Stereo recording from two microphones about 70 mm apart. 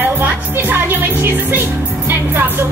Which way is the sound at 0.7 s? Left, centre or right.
Right.